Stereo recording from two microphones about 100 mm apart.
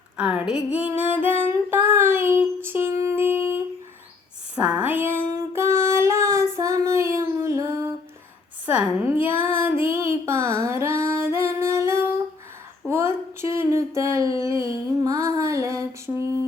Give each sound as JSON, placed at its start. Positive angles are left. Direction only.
{"t": 0.2, "sound": "female singing", "side_deg": -10}
{"t": 4.5, "sound": "child singing", "side_deg": -10}
{"t": 8.6, "sound": "child singing", "side_deg": -15}
{"t": 12.9, "sound": "a sound", "side_deg": -25}